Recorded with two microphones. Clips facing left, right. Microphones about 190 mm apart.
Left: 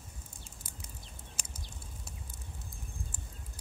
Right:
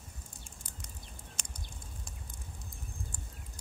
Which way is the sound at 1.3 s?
5° left (ahead or behind).